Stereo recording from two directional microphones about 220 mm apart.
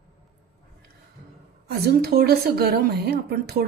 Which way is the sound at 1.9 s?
45° right (ahead or behind).